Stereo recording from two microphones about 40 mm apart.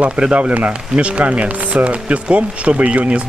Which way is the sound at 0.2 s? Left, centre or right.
Right.